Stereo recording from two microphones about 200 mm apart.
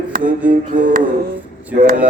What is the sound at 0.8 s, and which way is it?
Music, 40° right (ahead or behind).